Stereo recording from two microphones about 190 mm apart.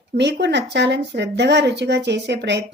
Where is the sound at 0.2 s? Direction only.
65° right (ahead or behind).